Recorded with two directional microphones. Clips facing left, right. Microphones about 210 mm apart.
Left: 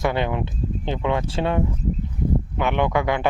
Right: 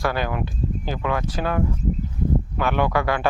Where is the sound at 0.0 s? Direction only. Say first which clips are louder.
Left 2 dB; 20° left (ahead or behind).